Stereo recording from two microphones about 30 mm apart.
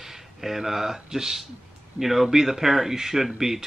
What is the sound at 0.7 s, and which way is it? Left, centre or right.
Speech, centre.